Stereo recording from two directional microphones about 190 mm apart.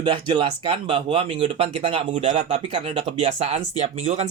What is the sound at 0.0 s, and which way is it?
Speech, 25° right (ahead or behind).